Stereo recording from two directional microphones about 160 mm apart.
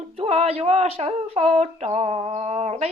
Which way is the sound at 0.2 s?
40° right (ahead or behind).